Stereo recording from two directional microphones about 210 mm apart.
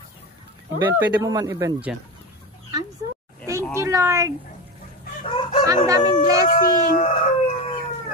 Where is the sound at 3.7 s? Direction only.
15° right (ahead or behind).